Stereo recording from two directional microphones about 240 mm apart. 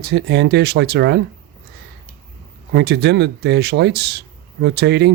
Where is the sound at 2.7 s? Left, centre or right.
Right.